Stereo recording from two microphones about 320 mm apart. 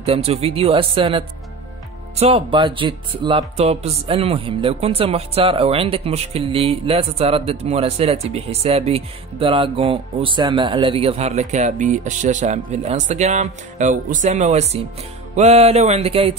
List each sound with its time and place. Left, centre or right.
0.0 s speech: centre
15.3 s music: centre